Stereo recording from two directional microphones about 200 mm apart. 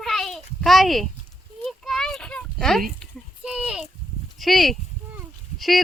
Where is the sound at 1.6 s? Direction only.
Centre (ahead or behind).